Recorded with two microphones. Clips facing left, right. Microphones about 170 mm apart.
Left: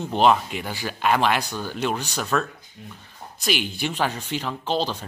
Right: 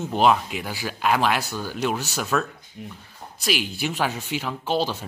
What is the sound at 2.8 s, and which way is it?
Speech, 20° right (ahead or behind).